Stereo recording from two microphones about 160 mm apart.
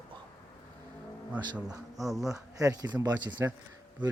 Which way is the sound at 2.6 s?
25° right (ahead or behind).